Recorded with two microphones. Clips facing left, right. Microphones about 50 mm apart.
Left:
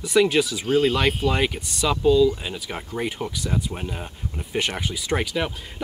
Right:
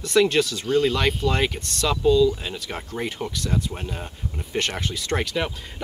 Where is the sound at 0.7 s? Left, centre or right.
Left.